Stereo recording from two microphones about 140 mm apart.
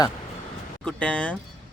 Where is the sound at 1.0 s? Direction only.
10° left (ahead or behind).